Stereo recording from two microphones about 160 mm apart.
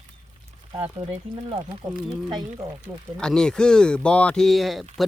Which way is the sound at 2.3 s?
25° right (ahead or behind).